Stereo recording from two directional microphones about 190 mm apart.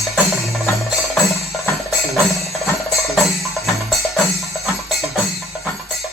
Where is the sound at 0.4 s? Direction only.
Centre (ahead or behind).